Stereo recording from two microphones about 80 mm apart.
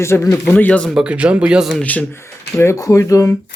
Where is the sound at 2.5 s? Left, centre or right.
Left.